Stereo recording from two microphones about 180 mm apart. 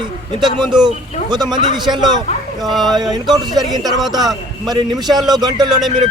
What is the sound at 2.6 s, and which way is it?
Speech, centre (ahead or behind).